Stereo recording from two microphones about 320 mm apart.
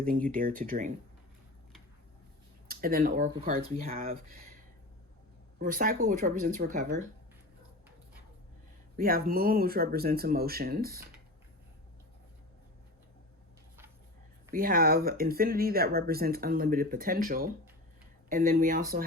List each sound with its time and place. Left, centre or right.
0.3 s speech: right
2.6 s speech: right
5.5 s speech: right
9.0 s speech: right
14.5 s speech: right